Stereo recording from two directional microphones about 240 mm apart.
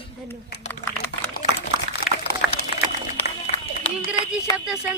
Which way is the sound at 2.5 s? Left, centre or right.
Left.